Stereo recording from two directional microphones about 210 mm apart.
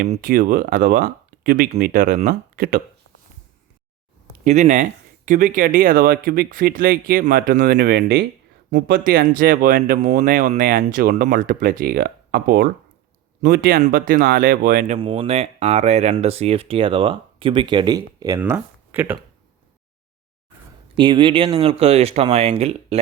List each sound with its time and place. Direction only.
0.1 s speech: 40° right (ahead or behind)
4.4 s speech: 35° right (ahead or behind)
7.8 s speech: 55° right (ahead or behind)
8.7 s speech: 45° right (ahead or behind)
14.9 s speech: 25° right (ahead or behind); by 19.1 s 10° right (ahead or behind)
20.9 s speech: 20° right (ahead or behind)